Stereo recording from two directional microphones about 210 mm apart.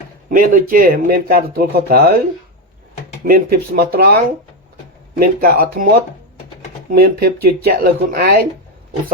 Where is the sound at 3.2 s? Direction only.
45° right (ahead or behind).